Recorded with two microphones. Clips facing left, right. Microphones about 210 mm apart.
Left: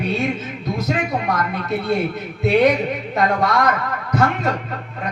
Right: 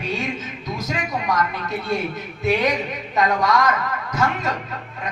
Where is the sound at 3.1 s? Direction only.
60° left (ahead or behind).